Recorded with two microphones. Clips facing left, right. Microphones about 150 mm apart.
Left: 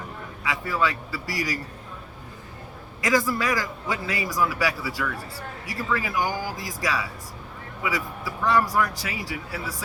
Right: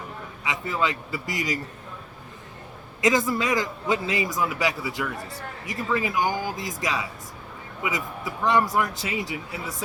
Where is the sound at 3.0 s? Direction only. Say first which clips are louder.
Right 1 dB; 20° right (ahead or behind).